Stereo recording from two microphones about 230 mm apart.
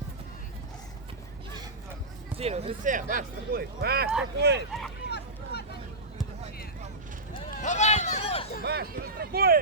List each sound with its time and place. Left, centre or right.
2.3 s speech: right
5.0 s vehicle: left
7.5 s a sound: left
8.6 s speech: right